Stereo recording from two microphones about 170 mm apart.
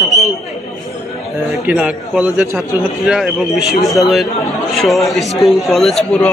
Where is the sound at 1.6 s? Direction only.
5° right (ahead or behind).